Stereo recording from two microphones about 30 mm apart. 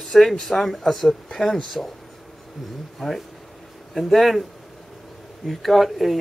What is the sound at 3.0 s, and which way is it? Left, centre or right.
Speech, centre.